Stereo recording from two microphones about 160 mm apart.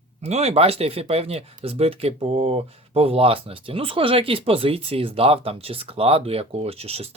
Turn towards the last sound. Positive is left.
turn(degrees=-40)  # may be behind; listen again after turning